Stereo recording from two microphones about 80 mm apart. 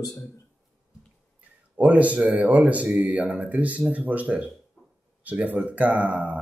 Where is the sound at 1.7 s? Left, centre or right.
Centre.